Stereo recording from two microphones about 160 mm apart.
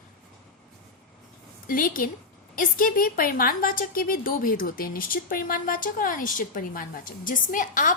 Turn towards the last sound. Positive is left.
turn(degrees=55)  # may be behind; listen again after turning